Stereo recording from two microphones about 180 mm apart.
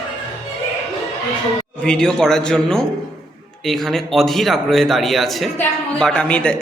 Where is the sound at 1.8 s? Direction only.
5° left (ahead or behind).